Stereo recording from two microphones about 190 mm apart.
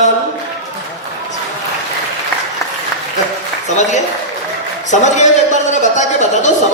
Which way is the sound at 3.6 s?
40° left (ahead or behind).